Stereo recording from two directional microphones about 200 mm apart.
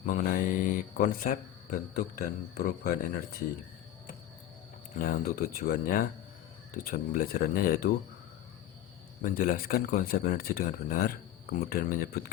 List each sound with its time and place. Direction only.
0.0 s speech: 40° left (ahead or behind)
5.0 s speech: 45° left (ahead or behind)
9.2 s speech: 45° left (ahead or behind)